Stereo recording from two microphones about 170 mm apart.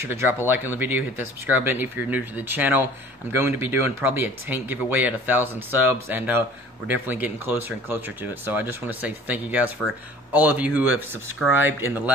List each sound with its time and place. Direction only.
0.0 s speech: 15° right (ahead or behind)